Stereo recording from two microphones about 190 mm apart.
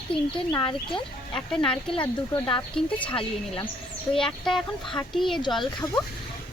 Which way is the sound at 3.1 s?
25° left (ahead or behind).